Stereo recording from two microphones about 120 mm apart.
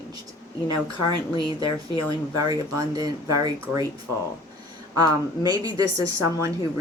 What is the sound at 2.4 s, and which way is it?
Speech, 30° right (ahead or behind).